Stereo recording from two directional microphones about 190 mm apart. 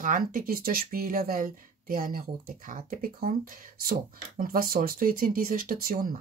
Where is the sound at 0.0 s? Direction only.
45° right (ahead or behind).